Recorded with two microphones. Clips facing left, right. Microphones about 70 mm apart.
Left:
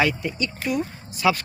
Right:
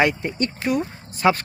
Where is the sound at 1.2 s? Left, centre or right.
Right.